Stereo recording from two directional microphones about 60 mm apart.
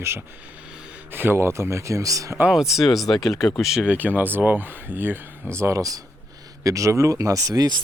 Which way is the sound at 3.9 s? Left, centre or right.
Right.